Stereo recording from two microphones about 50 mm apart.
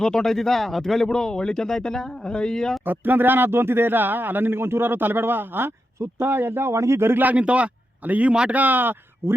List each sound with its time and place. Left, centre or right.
0.0 s speech: centre
2.8 s speech: right
7.2 s a man's voice: right
8.3 s speech: centre
8.5 s speech: right